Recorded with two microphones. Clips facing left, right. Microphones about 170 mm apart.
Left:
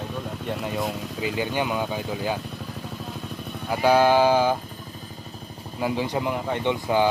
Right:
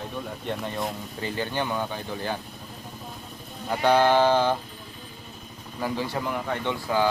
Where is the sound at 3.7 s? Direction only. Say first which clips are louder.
Left 2 dB; 10° left (ahead or behind).